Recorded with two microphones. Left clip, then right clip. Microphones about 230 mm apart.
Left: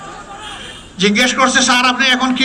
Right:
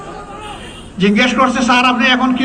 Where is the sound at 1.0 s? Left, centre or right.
Left.